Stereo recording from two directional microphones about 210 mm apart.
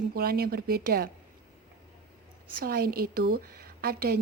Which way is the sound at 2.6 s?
45° right (ahead or behind).